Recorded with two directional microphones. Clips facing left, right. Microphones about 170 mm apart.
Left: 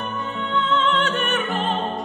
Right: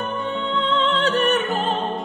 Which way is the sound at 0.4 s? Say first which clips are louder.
Left 1 dB; 30° right (ahead or behind).